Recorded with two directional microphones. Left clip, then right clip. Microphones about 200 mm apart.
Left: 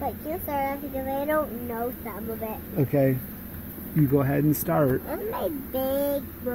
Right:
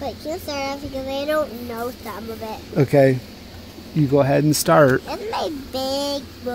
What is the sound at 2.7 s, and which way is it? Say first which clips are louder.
Speech: right 9 dB; 35° right (ahead or behind).